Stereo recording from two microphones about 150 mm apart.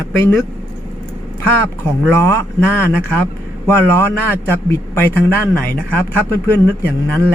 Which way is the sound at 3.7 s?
15° left (ahead or behind).